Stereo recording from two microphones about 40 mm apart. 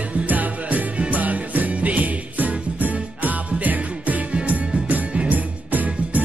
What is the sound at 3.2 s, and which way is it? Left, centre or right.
Music, right.